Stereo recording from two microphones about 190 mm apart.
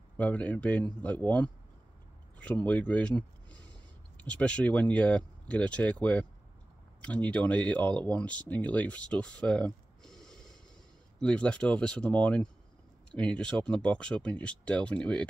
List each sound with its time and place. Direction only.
0.2 s speech: 5° left (ahead or behind)
10.0 s a sound: 5° left (ahead or behind)
11.1 s speech: 5° left (ahead or behind)